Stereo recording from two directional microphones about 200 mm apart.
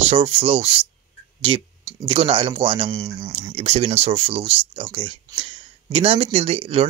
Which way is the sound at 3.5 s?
30° right (ahead or behind).